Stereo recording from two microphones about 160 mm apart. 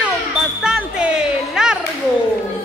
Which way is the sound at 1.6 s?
5° right (ahead or behind).